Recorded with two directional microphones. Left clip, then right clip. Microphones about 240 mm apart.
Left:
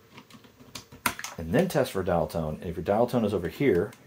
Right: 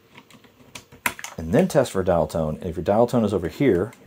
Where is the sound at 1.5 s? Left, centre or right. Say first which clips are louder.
Right 6 dB; right.